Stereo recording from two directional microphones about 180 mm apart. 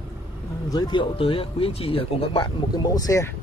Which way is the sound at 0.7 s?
25° left (ahead or behind).